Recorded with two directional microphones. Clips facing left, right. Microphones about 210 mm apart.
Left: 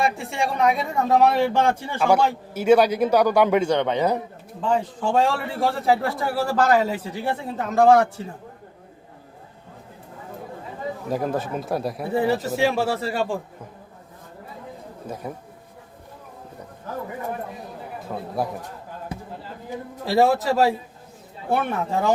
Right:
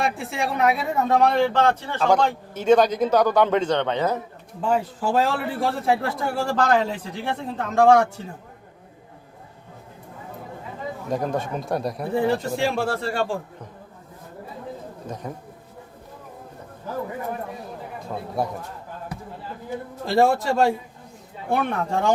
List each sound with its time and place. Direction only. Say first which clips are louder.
0.0 s speech: left 1 dB; centre (ahead or behind)
4.7 s a man's voice: even; 5° right (ahead or behind)
11.1 s a man's voice: even; 5° left (ahead or behind)
15.0 s speech: left 2 dB; 10° left (ahead or behind)
18.0 s a man's voice: even; centre (ahead or behind)
19.1 s a sound: left 4 dB; 25° left (ahead or behind)
20.1 s a man's voice: even; centre (ahead or behind)